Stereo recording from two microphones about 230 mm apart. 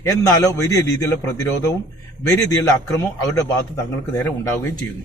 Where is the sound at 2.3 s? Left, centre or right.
Centre.